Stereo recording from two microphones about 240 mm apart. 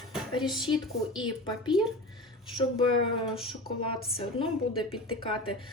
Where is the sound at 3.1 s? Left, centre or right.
Left.